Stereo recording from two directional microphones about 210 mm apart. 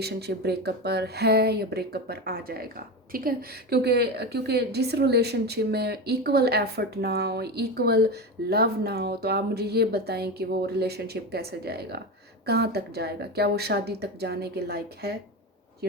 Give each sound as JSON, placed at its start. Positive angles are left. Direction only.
{"t": 0.0, "sound": "speech", "side_deg": -50}